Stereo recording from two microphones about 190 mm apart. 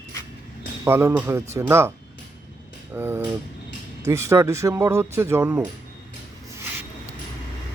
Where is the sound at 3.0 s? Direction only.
10° right (ahead or behind).